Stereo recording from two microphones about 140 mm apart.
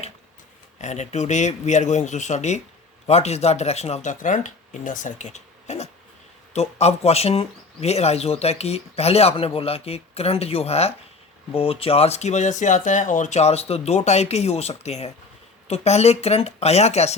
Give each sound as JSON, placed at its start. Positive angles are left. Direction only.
{"t": 0.8, "sound": "speech", "side_deg": 55}